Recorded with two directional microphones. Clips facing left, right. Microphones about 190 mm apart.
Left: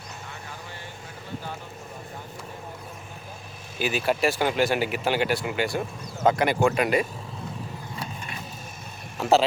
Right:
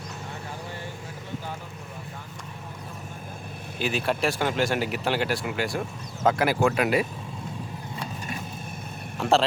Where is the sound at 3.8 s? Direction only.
5° left (ahead or behind).